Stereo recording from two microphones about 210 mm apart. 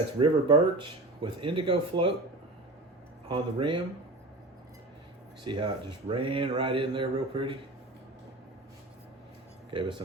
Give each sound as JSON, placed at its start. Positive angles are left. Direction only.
{"t": 0.2, "sound": "speech", "side_deg": -25}
{"t": 3.2, "sound": "speech", "side_deg": -25}
{"t": 5.5, "sound": "speech", "side_deg": -25}
{"t": 9.7, "sound": "speech", "side_deg": -20}